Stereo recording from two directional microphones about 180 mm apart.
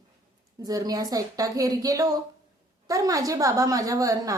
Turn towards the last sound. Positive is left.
turn(degrees=-20)  # may be behind; listen again after turning